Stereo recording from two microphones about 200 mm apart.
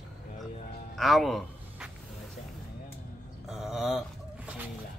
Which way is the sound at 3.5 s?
Centre (ahead or behind).